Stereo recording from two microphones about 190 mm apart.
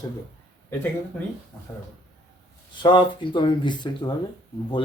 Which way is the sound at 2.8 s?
25° left (ahead or behind).